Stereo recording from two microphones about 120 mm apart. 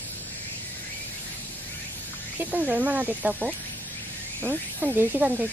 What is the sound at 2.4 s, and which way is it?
Speech, 15° right (ahead or behind).